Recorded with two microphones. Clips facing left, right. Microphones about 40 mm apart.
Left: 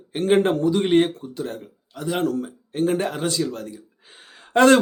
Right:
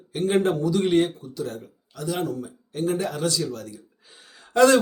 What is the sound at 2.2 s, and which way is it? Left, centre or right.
Speech, left.